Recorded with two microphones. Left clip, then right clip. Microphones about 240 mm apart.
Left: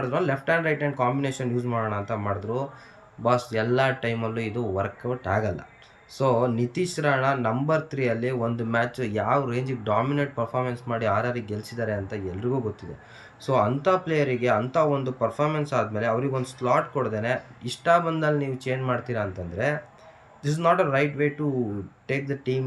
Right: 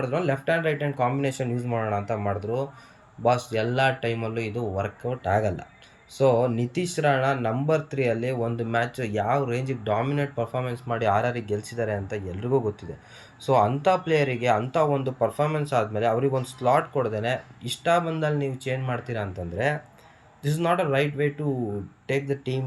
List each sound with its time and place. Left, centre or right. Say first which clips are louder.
0.1 s speech: left 2 dB; centre
1.4 s speech: left 1 dB; left
2.0 s speech: right 1 dB; centre